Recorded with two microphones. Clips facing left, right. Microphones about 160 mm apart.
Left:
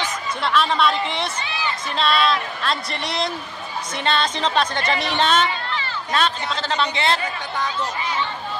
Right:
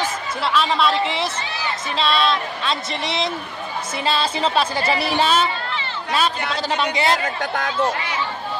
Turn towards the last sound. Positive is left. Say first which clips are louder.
# right 4 dB
turn(degrees=-55)  # may be behind; listen again after turning